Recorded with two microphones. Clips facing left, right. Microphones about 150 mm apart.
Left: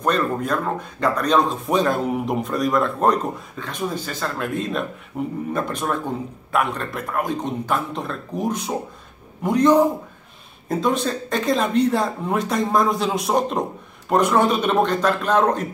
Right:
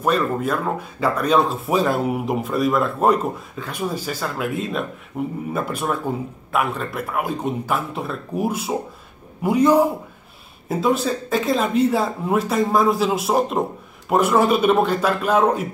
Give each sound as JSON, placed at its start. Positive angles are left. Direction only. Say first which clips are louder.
{"t": 0.0, "sound": "a man's voice", "louder": "right 1 dB", "side_deg": -5}